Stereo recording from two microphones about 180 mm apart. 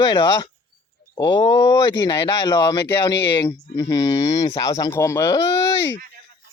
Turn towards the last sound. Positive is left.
turn(degrees=15)  # may be behind; listen again after turning